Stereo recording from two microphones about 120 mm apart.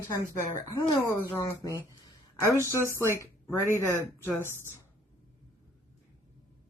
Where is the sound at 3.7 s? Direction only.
20° left (ahead or behind).